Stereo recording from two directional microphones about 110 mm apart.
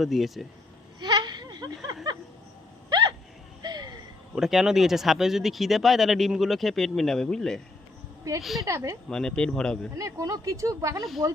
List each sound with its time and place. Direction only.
0.0 s speech: centre (ahead or behind)
0.9 s a sound: 40° right (ahead or behind)
3.6 s a sound: 40° right (ahead or behind)
4.4 s speech: 5° right (ahead or behind)
8.6 s speech: 25° right (ahead or behind)
9.0 s speech: 5° left (ahead or behind)
10.0 s speech: 30° right (ahead or behind)